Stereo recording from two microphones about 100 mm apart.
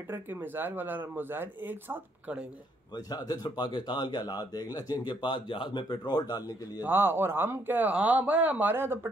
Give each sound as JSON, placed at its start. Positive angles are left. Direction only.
{"t": 0.1, "sound": "speech", "side_deg": -20}
{"t": 3.1, "sound": "speech", "side_deg": 40}
{"t": 6.8, "sound": "speech", "side_deg": -20}